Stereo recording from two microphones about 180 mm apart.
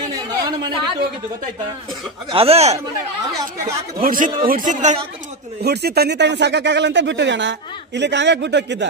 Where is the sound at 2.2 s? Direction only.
30° right (ahead or behind).